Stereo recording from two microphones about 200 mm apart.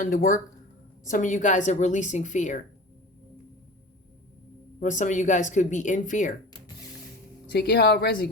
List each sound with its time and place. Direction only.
0.0 s speech: 40° left (ahead or behind)
4.8 s speech: 40° left (ahead or behind)
7.5 s speech: 55° left (ahead or behind)